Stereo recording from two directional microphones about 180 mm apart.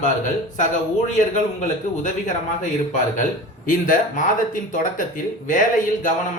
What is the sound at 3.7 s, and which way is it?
Speech, 50° left (ahead or behind).